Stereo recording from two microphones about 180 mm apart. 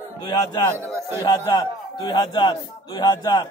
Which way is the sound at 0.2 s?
25° left (ahead or behind).